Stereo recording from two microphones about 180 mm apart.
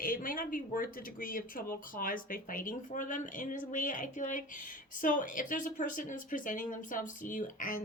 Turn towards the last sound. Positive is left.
turn(degrees=45)  # may be behind; listen again after turning